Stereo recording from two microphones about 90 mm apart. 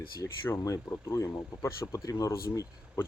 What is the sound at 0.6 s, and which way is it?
Speech, 35° left (ahead or behind).